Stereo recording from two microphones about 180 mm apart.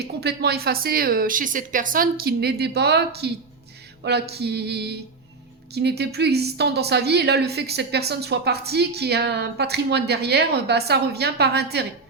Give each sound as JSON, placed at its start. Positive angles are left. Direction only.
{"t": 0.0, "sound": "a woman's voice", "side_deg": -65}
{"t": 4.0, "sound": "a sound", "side_deg": -65}
{"t": 5.7, "sound": "a woman's voice", "side_deg": -65}